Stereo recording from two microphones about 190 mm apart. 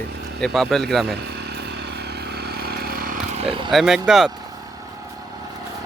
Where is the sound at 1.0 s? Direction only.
60° right (ahead or behind).